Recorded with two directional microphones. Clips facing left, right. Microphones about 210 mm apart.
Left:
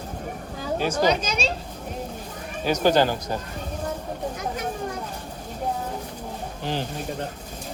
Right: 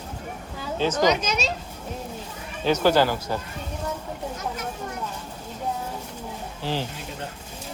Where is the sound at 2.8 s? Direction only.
15° left (ahead or behind).